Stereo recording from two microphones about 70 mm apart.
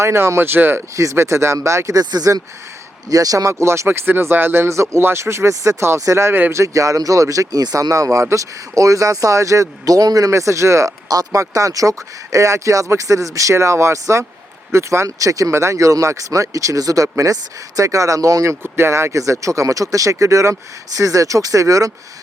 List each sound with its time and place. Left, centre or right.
0.0 s speech: right
2.0 s speech: right
11.1 s speech: right
18.6 s speech: right